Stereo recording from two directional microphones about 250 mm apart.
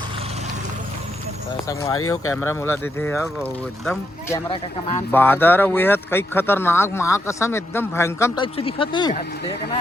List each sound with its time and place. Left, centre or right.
2.0 s speech: left
2.3 s speech: centre
8.5 s speech: left